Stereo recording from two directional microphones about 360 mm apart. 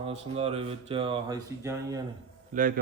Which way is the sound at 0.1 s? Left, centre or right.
Centre.